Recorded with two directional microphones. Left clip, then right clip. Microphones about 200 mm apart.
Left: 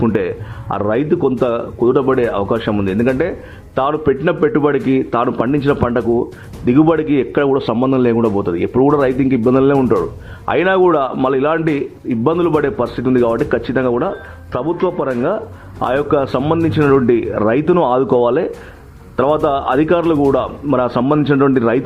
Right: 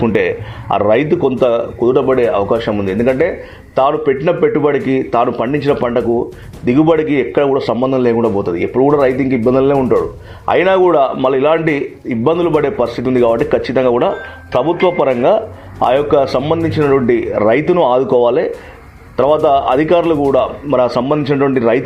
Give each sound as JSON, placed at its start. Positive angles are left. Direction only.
{"t": 0.0, "sound": "a man's voice", "side_deg": 15}